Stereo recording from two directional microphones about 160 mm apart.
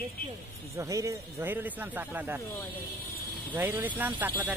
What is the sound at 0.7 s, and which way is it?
Speech, 20° right (ahead or behind).